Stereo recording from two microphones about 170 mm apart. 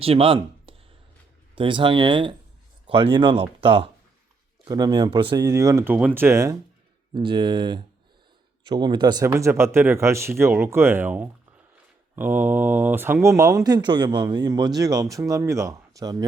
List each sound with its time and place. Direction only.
0.0 s speech: 35° right (ahead or behind); by 6.6 s 20° right (ahead or behind)
7.1 s speech: 30° right (ahead or behind)